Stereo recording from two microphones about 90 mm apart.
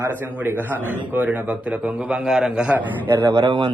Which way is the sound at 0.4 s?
20° right (ahead or behind).